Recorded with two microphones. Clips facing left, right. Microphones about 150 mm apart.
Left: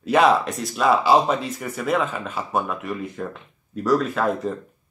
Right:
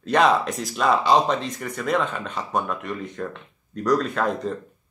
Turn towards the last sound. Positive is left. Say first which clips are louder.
# left 1 dB
turn(degrees=5)  # may be behind; listen again after turning